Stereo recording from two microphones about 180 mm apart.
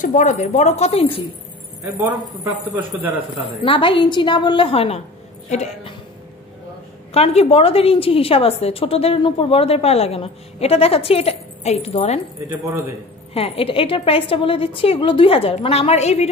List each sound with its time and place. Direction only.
0.0 s a woman's voice: 45° left (ahead or behind)
2.0 s a man's voice: 15° right (ahead or behind)
3.6 s a woman's voice: 30° left (ahead or behind)
7.2 s a woman's voice: 35° left (ahead or behind)
12.4 s a man's voice: 15° right (ahead or behind)
13.3 s a woman's voice: 35° left (ahead or behind)